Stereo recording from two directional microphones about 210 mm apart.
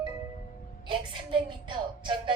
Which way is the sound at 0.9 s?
25° right (ahead or behind).